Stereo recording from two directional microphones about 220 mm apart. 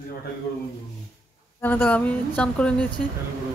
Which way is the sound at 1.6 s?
10° left (ahead or behind).